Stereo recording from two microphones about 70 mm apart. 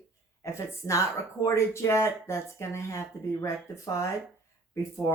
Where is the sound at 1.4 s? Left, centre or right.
Left.